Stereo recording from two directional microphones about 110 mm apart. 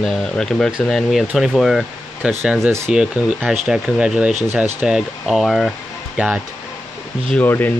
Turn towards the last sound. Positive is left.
turn(degrees=15)  # may be behind; listen again after turning